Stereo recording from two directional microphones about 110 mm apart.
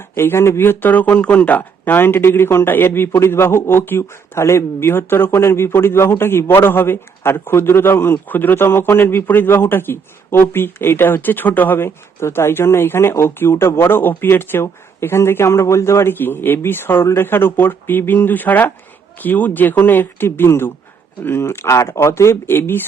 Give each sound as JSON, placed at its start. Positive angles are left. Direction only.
{"t": 0.2, "sound": "speech", "side_deg": 25}